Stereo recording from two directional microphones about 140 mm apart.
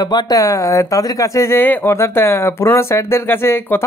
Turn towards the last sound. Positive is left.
turn(degrees=15)  # may be behind; listen again after turning